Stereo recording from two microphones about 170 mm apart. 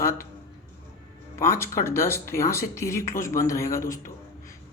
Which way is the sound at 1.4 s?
15° left (ahead or behind).